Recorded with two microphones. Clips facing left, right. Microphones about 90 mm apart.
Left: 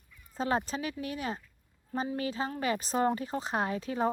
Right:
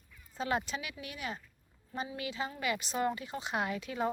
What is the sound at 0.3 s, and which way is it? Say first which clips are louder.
Speech: left 3 dB; 35° left (ahead or behind).